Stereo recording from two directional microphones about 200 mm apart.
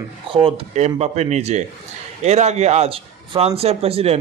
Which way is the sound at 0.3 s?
30° right (ahead or behind).